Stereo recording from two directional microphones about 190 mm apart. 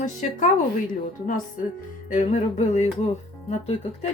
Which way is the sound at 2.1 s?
40° left (ahead or behind).